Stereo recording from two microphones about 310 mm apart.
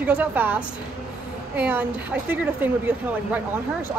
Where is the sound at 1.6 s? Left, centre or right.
Centre.